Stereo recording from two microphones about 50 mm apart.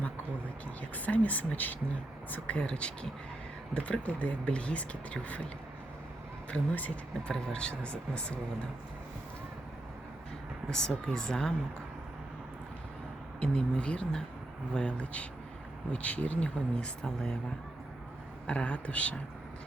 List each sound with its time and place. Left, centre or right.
0.8 s speech: left
2.5 s speech: left
6.5 s speech: left
7.3 s speech: centre
10.7 s speech: centre
13.4 s speech: centre
18.4 s speech: left